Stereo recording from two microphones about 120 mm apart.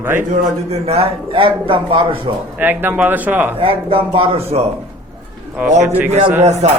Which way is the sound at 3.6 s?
50° right (ahead or behind).